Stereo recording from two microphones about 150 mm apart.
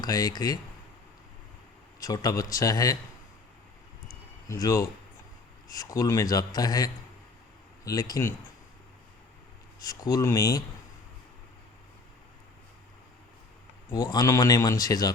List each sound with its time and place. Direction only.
0.0 s a man's voice: 25° left (ahead or behind)
2.0 s a man's voice: 25° left (ahead or behind)
4.4 s a man's voice: 20° left (ahead or behind)
9.8 s a man's voice: 25° left (ahead or behind)
13.9 s a man's voice: 25° left (ahead or behind)